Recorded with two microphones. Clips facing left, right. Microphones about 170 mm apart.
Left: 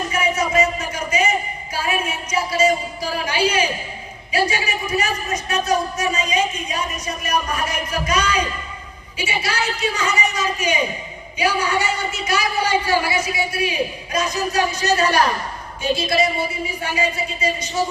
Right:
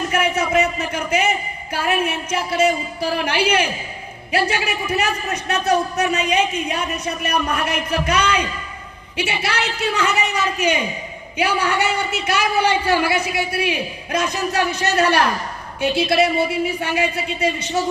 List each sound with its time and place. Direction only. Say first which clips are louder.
0.1 s a man's voice: right 2 dB; 60° right (ahead or behind)